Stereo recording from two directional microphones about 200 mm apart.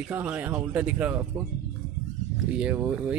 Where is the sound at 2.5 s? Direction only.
5° right (ahead or behind).